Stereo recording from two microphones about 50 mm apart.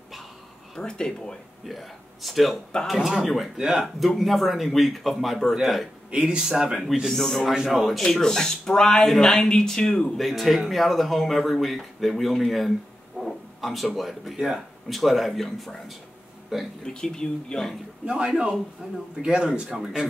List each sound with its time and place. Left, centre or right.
0.7 s speech: centre
1.7 s a man's voice: centre
3.5 s speech: centre
3.8 s a man's voice: centre
6.0 s speech: centre
7.1 s a man's voice: centre
7.5 s a man's voice: centre
8.0 s speech: centre
10.1 s a man's voice: centre
16.5 s speech: centre
16.8 s speech: centre
18.0 s speech: right